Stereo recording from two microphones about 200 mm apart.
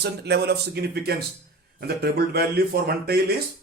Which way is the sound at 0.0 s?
55° right (ahead or behind).